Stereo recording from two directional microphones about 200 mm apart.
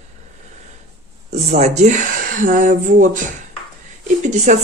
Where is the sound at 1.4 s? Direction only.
30° right (ahead or behind).